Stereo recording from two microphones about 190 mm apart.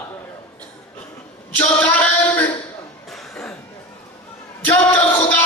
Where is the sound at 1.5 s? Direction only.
5° left (ahead or behind).